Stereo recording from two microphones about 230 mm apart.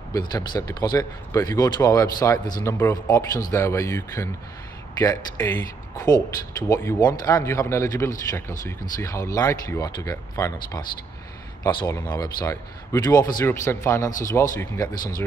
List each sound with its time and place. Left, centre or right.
0.3 s speech: centre